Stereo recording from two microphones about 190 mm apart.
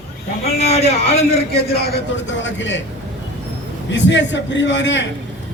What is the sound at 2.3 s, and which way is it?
Speech, 75° left (ahead or behind).